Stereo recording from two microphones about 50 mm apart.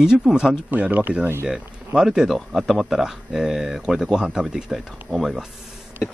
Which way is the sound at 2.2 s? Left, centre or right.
Centre.